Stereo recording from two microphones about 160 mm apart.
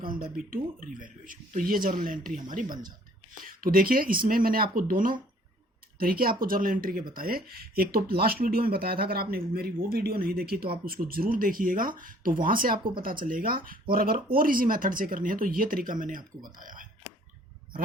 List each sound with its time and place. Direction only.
0.1 s speech: 65° right (ahead or behind)
2.6 s speech: 25° right (ahead or behind)
3.4 s speech: 65° right (ahead or behind)